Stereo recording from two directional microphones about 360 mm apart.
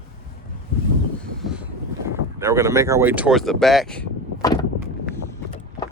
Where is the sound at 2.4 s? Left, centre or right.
Centre.